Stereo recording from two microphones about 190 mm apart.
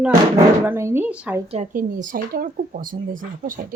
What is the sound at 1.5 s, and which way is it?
Speech, 40° right (ahead or behind).